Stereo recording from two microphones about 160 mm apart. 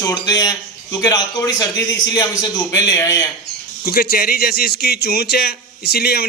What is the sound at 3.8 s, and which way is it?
Speech, 70° left (ahead or behind).